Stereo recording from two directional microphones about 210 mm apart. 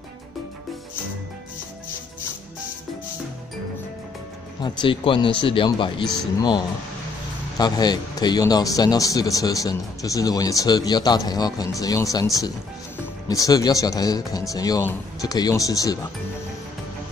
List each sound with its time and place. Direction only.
4.6 s speech: 20° left (ahead or behind)
7.5 s speech: 20° left (ahead or behind)